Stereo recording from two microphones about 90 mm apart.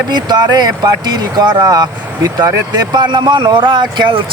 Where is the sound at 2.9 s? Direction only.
55° right (ahead or behind).